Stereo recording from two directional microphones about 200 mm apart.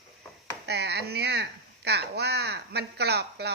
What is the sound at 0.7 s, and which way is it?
Speech, 55° right (ahead or behind).